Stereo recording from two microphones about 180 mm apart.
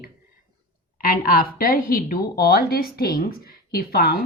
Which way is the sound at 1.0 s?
55° left (ahead or behind).